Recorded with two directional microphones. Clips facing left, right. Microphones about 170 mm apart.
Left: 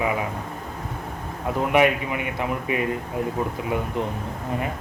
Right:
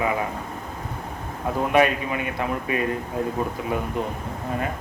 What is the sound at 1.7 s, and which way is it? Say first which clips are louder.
A man's voice: even; 20° left (ahead or behind).